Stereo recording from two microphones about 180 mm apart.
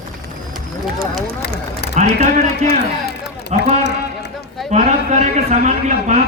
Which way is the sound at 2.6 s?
65° left (ahead or behind).